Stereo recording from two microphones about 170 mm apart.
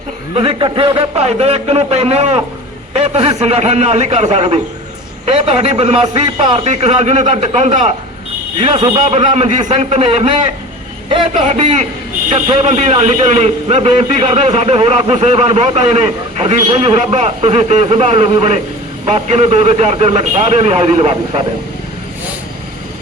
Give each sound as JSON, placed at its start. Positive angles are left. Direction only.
{"t": 0.3, "sound": "a man's voice", "side_deg": -30}
{"t": 11.4, "sound": "a man's voice", "side_deg": -45}